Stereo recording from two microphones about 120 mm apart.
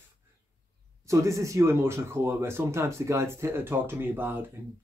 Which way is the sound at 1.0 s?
25° right (ahead or behind).